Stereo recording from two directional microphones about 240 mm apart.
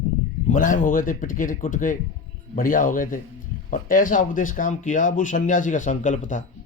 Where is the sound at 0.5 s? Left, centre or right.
Left.